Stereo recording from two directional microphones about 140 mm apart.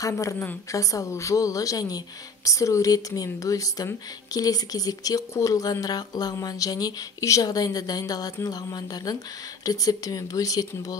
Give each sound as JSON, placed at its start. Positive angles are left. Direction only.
{"t": 0.0, "sound": "speech", "side_deg": 25}